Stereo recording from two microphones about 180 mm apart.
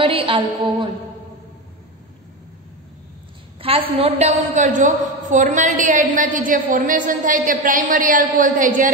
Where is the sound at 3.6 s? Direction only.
30° right (ahead or behind).